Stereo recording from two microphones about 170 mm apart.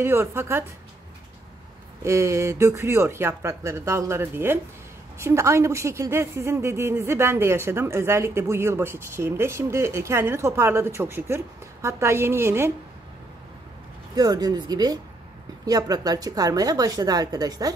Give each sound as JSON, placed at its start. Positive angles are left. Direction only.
{"t": 0.0, "sound": "a woman's voice", "side_deg": -15}
{"t": 2.0, "sound": "a woman's voice", "side_deg": -15}
{"t": 14.1, "sound": "a woman's voice", "side_deg": -20}